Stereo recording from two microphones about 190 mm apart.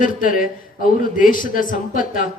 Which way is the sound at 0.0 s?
45° left (ahead or behind).